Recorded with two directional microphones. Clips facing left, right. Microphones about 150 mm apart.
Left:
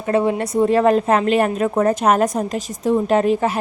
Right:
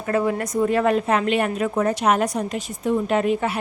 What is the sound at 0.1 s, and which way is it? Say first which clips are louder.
A woman's voice: left 4 dB; 25° left (ahead or behind).